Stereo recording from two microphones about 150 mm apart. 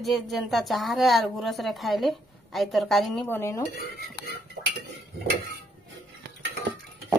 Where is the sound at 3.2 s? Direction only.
15° left (ahead or behind).